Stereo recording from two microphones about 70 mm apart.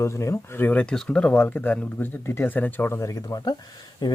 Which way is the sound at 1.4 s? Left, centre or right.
Left.